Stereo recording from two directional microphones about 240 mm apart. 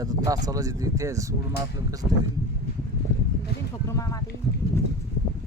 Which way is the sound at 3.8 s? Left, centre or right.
Centre.